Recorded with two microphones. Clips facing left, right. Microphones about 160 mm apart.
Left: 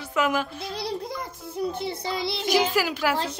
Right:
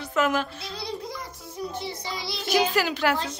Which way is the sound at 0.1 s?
10° left (ahead or behind).